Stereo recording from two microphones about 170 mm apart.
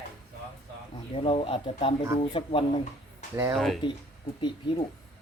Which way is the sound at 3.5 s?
Centre (ahead or behind).